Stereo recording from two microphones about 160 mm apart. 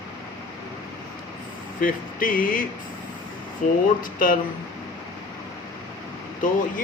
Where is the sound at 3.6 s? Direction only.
50° left (ahead or behind).